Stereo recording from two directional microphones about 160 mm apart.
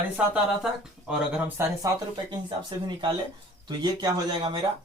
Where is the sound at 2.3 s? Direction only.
30° right (ahead or behind).